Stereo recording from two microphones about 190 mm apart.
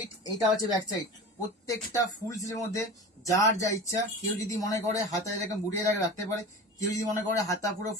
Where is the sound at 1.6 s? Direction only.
20° left (ahead or behind).